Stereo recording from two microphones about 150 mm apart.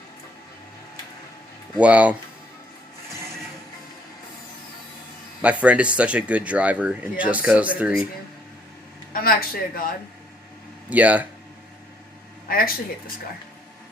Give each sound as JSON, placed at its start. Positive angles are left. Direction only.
{"t": 1.8, "sound": "speech", "side_deg": -10}
{"t": 5.4, "sound": "speech", "side_deg": -10}
{"t": 9.1, "sound": "speech", "side_deg": 80}
{"t": 10.8, "sound": "speech", "side_deg": -10}
{"t": 12.5, "sound": "speech", "side_deg": 75}